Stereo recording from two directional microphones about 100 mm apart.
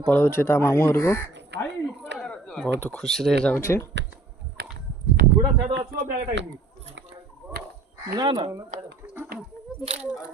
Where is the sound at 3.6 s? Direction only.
25° left (ahead or behind).